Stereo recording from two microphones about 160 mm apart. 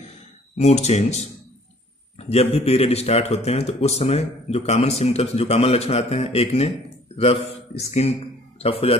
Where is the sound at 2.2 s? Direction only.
40° left (ahead or behind).